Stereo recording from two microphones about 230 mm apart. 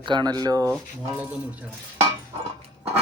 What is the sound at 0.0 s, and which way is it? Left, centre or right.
A man's voice, centre.